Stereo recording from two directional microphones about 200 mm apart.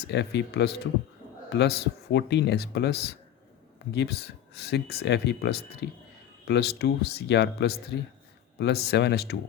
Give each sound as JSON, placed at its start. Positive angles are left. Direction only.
{"t": 0.1, "sound": "speech", "side_deg": 60}